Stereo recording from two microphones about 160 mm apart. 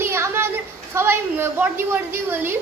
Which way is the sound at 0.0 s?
15° right (ahead or behind).